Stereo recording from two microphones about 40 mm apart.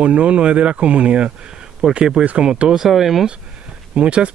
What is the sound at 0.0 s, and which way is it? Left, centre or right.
Speech, right.